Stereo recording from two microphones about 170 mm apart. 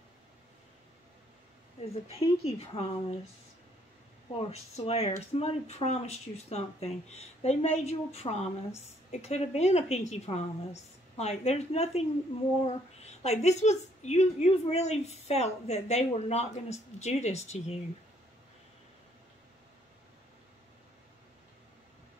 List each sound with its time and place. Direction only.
2.0 s speech: 40° left (ahead or behind)
4.4 s speech: 35° left (ahead or behind)